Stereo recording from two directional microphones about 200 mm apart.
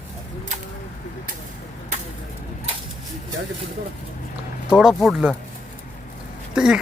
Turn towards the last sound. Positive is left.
turn(degrees=-5)  # may be behind; listen again after turning